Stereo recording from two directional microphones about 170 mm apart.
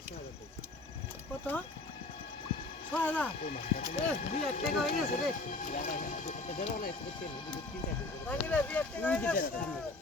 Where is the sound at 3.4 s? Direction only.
50° left (ahead or behind).